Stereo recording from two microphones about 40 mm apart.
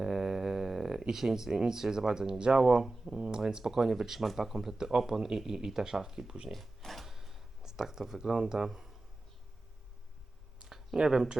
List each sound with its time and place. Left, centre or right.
0.0 s mantra: centre
1.0 s speech: centre
3.4 s speech: centre
6.5 s a sound: centre
10.6 s a sound: centre
10.9 s speech: centre